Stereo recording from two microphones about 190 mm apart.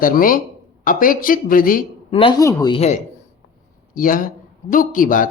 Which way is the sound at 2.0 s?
30° left (ahead or behind).